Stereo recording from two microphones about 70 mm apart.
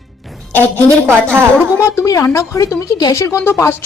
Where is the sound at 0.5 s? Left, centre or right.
Left.